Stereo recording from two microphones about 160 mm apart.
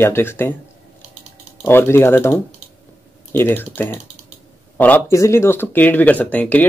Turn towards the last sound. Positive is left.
turn(degrees=10)  # may be behind; listen again after turning